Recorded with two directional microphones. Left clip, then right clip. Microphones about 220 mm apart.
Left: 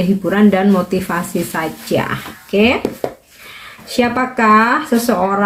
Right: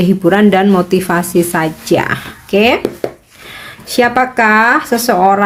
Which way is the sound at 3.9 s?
50° right (ahead or behind).